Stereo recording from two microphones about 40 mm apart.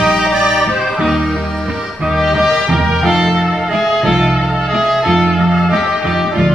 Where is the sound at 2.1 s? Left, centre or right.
Centre.